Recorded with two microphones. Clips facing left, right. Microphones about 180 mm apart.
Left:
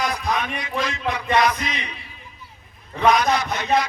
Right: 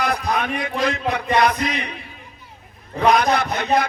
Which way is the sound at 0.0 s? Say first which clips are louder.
Right 2 dB; 55° right (ahead or behind).